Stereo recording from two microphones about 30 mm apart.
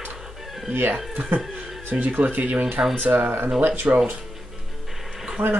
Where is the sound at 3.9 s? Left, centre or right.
Right.